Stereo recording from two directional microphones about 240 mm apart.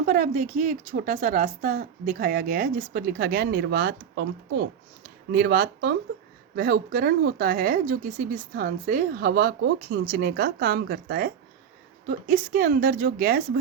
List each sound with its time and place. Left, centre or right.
0.0 s speech: right